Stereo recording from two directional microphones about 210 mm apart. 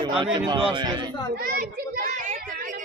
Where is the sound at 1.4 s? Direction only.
45° right (ahead or behind).